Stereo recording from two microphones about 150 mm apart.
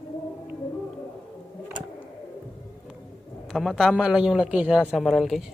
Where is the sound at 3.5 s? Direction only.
Centre (ahead or behind).